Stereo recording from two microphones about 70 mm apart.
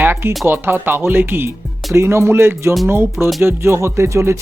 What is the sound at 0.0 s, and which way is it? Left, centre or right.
Music, right.